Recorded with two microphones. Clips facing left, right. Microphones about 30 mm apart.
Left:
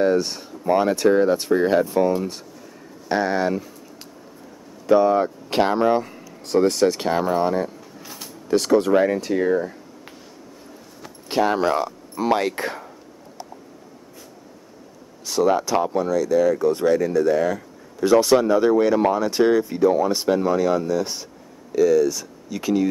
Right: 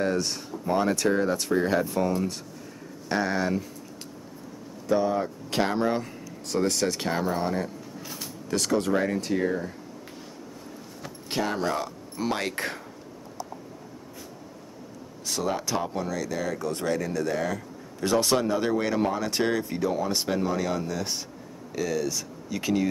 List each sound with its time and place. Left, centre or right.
0.0 s speech: centre
4.8 s speech: left; by 9.7 s centre
11.0 s a sound: centre
11.4 s speech: left
11.8 s speech: centre
12.4 s speech: centre
15.2 s speech: centre